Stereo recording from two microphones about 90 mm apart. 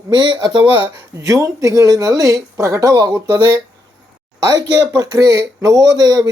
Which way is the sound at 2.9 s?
50° right (ahead or behind).